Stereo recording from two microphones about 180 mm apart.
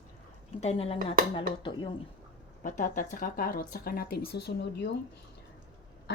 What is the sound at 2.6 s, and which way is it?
Speech, 45° left (ahead or behind).